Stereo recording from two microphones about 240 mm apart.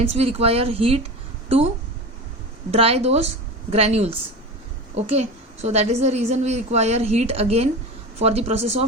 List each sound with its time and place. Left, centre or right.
0.0 s a woman's voice: right
2.7 s a woman's voice: right